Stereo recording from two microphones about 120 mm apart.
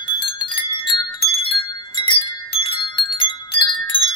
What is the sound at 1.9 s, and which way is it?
Wind chime, 40° left (ahead or behind).